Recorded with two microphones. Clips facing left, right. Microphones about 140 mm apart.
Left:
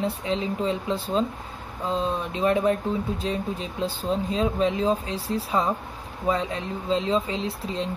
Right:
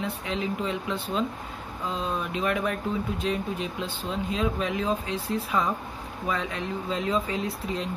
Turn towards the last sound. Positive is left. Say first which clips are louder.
# left 1 dB
turn(degrees=30)  # may be behind; listen again after turning